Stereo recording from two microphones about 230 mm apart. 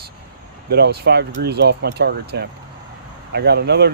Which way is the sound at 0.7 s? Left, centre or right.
Right.